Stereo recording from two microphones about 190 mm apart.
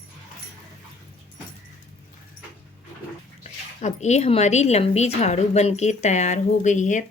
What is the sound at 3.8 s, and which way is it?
Speech, 40° left (ahead or behind).